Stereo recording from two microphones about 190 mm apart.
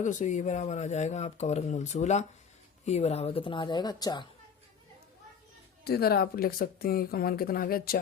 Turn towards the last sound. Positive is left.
turn(degrees=50)  # may be behind; listen again after turning